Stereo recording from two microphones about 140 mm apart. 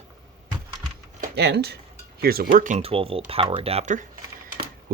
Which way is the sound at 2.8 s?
45° right (ahead or behind).